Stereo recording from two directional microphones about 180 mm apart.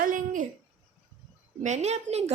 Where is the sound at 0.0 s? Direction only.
45° right (ahead or behind).